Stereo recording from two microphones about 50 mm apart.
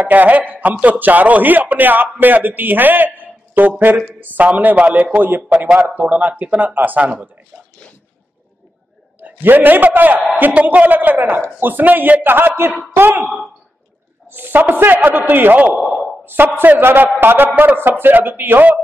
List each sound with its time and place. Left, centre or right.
0.0 s a man's voice: right
9.2 s a man's voice: right
14.3 s a man's voice: right